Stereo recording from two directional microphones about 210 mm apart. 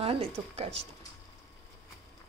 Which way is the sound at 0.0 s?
25° right (ahead or behind).